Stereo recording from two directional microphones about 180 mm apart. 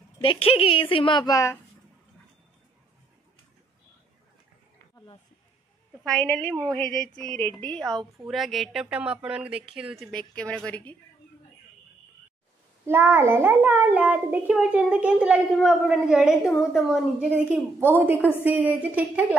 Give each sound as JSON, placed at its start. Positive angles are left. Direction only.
{"t": 0.2, "sound": "a woman's voice", "side_deg": 30}
{"t": 6.0, "sound": "a woman's voice", "side_deg": 5}
{"t": 6.5, "sound": "speech", "side_deg": -20}
{"t": 7.2, "sound": "a woman's voice", "side_deg": 10}
{"t": 12.8, "sound": "a child's voice", "side_deg": -10}